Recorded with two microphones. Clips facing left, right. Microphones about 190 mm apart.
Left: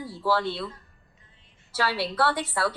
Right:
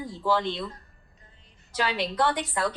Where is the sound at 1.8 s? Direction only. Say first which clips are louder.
Even; 15° right (ahead or behind).